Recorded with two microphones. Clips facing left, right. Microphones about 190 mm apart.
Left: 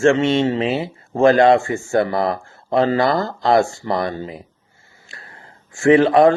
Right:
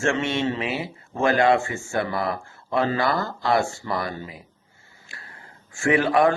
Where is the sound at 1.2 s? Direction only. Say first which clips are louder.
Left 7 dB; 40° left (ahead or behind).